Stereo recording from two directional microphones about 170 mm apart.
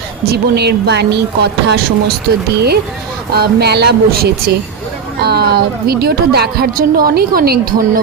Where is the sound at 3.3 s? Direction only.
75° right (ahead or behind).